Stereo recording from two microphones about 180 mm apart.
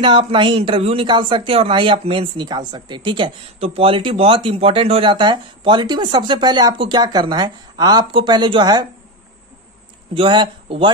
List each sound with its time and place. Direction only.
0.0 s speech: 30° right (ahead or behind)
10.1 s speech: 25° right (ahead or behind)